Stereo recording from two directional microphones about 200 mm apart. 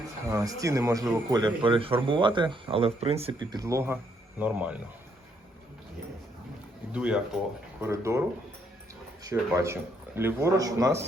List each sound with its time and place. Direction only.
0.3 s speech: 15° right (ahead or behind)
3.5 s a man's voice: 15° right (ahead or behind)
6.9 s a man's voice: 5° right (ahead or behind)
9.2 s a man's voice: 15° right (ahead or behind)